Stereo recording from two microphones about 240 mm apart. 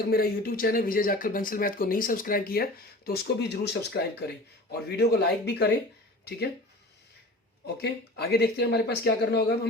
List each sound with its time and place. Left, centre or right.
0.1 s speech: left
7.8 s speech: left